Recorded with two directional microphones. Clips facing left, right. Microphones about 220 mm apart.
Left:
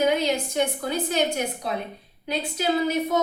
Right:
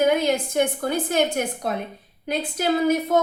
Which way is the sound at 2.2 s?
50° right (ahead or behind).